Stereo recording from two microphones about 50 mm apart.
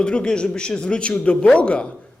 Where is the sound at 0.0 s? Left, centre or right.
Centre.